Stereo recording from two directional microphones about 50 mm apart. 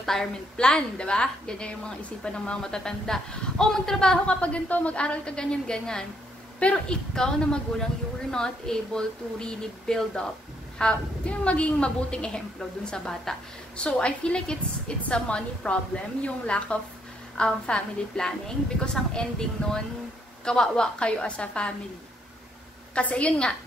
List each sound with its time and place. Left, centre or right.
0.0 s a woman's voice: centre
4.4 s a woman's voice: left
22.9 s a woman's voice: left